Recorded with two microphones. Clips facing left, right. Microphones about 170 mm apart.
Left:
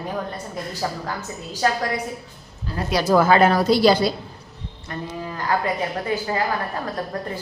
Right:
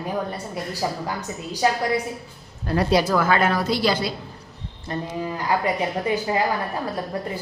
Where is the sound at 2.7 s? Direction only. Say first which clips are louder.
Right 7 dB; 65° right (ahead or behind).